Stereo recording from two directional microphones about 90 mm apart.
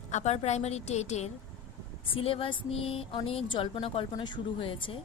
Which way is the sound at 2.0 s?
90° left.